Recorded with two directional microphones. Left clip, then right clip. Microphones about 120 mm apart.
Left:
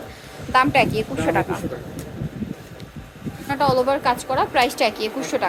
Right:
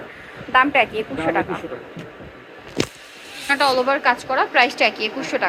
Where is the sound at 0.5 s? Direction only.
40° left (ahead or behind).